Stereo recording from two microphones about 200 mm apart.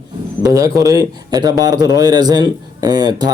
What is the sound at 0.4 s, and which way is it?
Speech, 15° right (ahead or behind).